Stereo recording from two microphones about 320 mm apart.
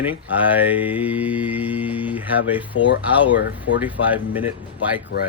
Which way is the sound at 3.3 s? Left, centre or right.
Left.